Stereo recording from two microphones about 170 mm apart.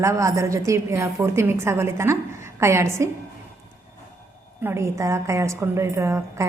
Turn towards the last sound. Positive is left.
turn(degrees=-15)  # may be behind; listen again after turning